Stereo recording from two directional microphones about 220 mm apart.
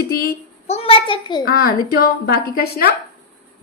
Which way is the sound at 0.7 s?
25° left (ahead or behind).